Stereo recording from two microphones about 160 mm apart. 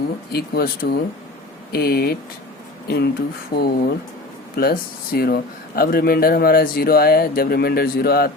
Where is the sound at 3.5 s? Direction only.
90° left.